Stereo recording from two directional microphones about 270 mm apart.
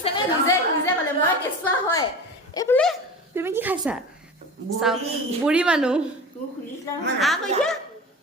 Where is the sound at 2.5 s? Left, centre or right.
Centre.